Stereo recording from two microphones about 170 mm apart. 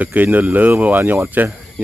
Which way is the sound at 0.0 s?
10° right (ahead or behind).